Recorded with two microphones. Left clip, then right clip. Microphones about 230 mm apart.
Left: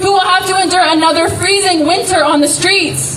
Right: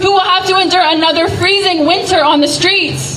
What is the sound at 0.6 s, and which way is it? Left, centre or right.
Speech, right.